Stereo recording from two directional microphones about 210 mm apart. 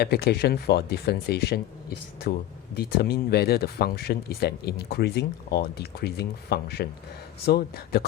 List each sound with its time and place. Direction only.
0.0 s speech: 50° left (ahead or behind)